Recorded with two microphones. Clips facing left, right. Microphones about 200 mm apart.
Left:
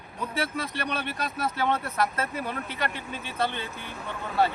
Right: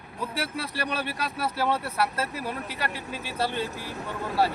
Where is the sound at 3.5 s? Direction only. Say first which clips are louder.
Right 5 dB; 40° right (ahead or behind).